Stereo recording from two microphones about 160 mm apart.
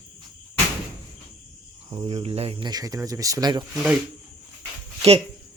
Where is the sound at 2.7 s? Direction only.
20° right (ahead or behind).